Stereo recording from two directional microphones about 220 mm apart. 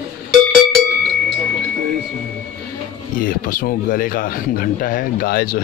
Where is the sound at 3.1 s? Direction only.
40° left (ahead or behind).